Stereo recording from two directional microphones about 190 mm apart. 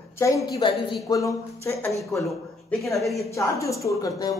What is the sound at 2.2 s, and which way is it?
A man's voice, centre (ahead or behind).